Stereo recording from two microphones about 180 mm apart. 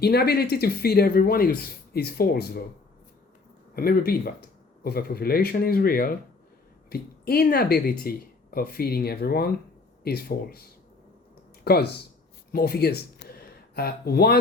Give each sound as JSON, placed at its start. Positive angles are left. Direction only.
{"t": 0.0, "sound": "speech", "side_deg": 60}
{"t": 3.8, "sound": "speech", "side_deg": 55}